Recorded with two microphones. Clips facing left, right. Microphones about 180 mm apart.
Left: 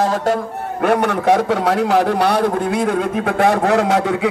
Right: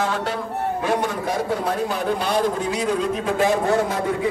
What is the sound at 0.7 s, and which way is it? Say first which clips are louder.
A man's voice: left 9 dB; 65° left (ahead or behind).